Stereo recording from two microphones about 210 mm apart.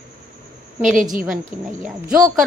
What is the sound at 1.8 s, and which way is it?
Speech, 5° right (ahead or behind).